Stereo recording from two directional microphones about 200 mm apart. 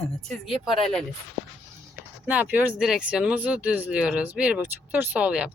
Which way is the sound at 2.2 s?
10° right (ahead or behind).